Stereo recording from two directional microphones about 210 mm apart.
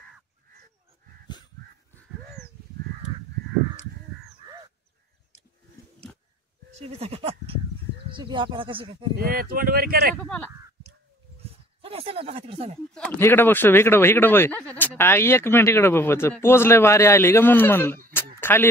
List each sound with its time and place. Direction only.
6.7 s goat: 30° right (ahead or behind)
8.1 s speech: 20° right (ahead or behind)
9.2 s speech: 45° right (ahead or behind)
11.8 s speech: 30° right (ahead or behind)
12.9 s speech: 10° left (ahead or behind)
18.1 s a sound: 10° left (ahead or behind)